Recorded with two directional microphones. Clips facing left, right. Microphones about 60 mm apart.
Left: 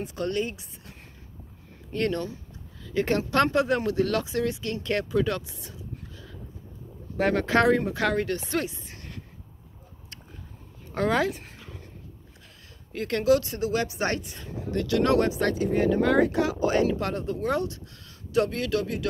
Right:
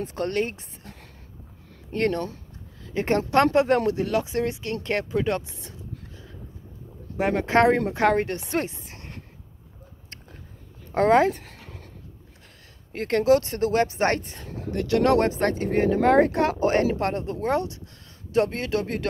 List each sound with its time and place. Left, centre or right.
0.0 s speech: right
1.9 s speech: right
3.6 s speech: right
3.9 s speech: right
7.2 s speech: centre
7.4 s speech: right
10.9 s speech: right
12.9 s speech: right